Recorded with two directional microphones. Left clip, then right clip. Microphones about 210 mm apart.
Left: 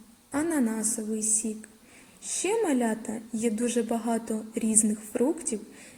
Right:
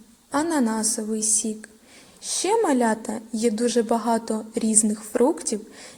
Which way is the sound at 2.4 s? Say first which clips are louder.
Right 6 dB; 10° right (ahead or behind).